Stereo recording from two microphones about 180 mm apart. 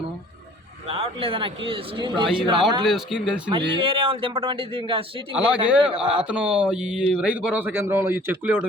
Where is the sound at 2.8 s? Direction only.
Centre (ahead or behind).